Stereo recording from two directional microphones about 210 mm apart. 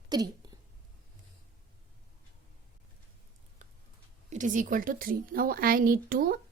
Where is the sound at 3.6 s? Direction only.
35° right (ahead or behind).